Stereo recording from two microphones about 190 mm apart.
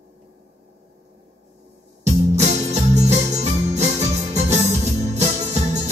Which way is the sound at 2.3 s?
35° right (ahead or behind).